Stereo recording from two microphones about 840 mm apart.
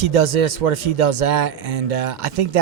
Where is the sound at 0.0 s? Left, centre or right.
Right.